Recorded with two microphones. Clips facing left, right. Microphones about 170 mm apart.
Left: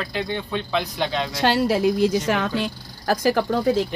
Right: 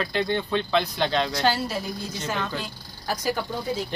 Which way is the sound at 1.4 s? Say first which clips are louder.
Left 6 dB; 85° left.